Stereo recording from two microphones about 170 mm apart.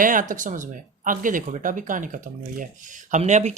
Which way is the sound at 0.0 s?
50° right (ahead or behind).